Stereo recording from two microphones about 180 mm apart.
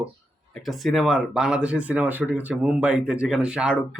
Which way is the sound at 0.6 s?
Centre (ahead or behind).